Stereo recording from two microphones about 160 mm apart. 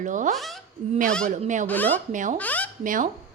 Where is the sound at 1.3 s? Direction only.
50° right (ahead or behind).